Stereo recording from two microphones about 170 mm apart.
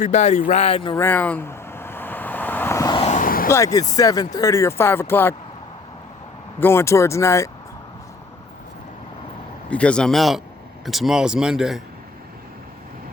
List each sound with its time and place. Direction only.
0.0 s speech: 45° left (ahead or behind)
0.9 s vehicle: 10° left (ahead or behind)
2.9 s vehicle: 40° left (ahead or behind); by 3.5 s 55° left (ahead or behind)
3.5 s speech: 20° left (ahead or behind)
6.6 s speech: 15° left (ahead or behind)
9.6 s speech: 5° left (ahead or behind)